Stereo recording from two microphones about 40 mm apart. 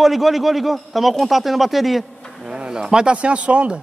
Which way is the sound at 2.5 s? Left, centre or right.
Right.